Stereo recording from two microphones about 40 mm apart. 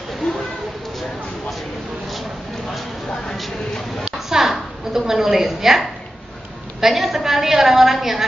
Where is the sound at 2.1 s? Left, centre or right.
Centre.